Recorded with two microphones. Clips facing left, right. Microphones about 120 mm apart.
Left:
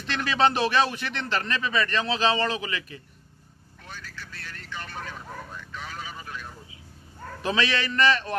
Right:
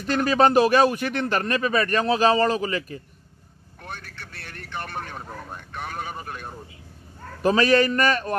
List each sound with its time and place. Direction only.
0.0 s a man's voice: 45° right (ahead or behind)
3.8 s vehicle: 60° right (ahead or behind)
7.4 s a man's voice: 45° right (ahead or behind)